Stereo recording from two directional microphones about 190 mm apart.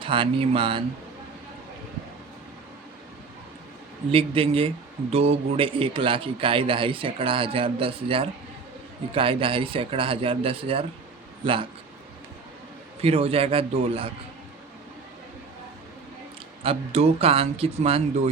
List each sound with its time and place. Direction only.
0.0 s a man's voice: 25° right (ahead or behind)
4.1 s a man's voice: 30° right (ahead or behind)
13.0 s speech: 30° right (ahead or behind)
16.6 s speech: 35° right (ahead or behind)